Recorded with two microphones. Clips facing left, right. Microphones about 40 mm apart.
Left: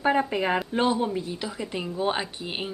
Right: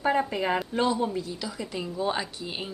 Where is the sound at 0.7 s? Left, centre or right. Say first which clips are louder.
Left 2 dB; left.